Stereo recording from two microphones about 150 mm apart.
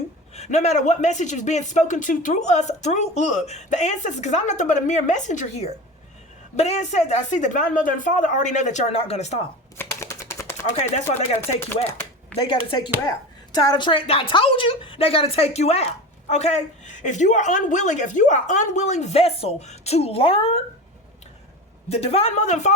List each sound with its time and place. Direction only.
0.3 s a man's voice: 45° left (ahead or behind)
9.7 s a sound: 20° left (ahead or behind)
10.8 s a man's voice: 50° left (ahead or behind)
12.3 s a woman's voice: 35° left (ahead or behind)
21.8 s a man's voice: 45° left (ahead or behind)